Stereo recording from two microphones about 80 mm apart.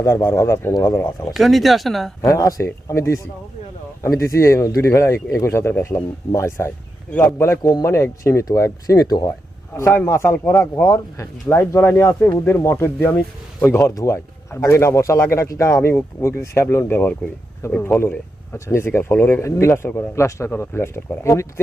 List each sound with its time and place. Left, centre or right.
0.0 s a man's voice: left
1.3 s speech: centre
2.2 s speech: left
7.6 s speech: left
7.9 s speech: left
9.8 s a man's voice: left
17.6 s speech: left